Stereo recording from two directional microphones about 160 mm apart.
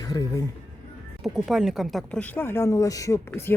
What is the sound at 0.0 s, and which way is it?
Speech, 20° left (ahead or behind).